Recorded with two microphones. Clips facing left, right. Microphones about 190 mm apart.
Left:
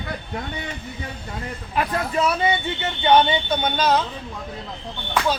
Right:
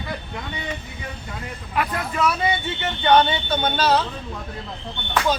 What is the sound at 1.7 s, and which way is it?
Speech, 25° left (ahead or behind).